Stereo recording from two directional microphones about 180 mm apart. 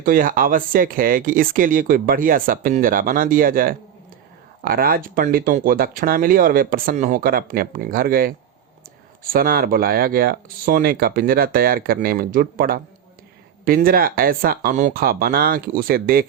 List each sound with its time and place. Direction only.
0.0 s speech: 50° right (ahead or behind)